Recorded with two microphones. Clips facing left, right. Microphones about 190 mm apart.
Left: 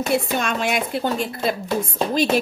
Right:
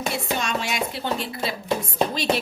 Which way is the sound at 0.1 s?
55° left (ahead or behind).